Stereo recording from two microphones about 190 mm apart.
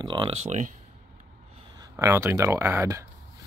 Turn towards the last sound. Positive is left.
turn(degrees=-15)  # may be behind; listen again after turning